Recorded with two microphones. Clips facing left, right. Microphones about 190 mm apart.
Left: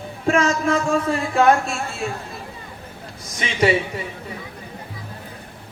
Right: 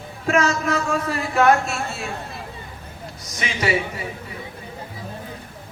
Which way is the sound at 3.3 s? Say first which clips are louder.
Left 6 dB; 30° left (ahead or behind).